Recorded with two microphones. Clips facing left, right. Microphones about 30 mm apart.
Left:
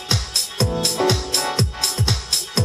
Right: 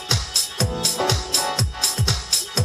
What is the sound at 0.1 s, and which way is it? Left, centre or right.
Music, centre.